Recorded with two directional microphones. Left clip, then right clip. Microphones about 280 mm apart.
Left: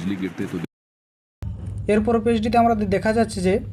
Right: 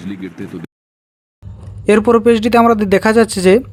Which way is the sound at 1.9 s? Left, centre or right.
Right.